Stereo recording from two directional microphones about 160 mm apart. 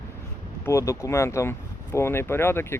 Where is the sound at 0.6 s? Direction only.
20° left (ahead or behind).